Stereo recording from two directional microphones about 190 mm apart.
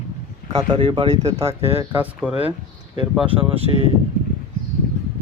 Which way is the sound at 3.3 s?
30° right (ahead or behind).